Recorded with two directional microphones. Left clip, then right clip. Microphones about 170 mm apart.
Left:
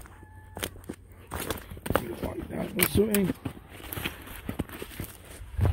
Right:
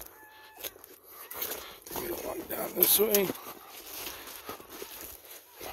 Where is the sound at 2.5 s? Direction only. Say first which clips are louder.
Right 1 dB; 30° right (ahead or behind).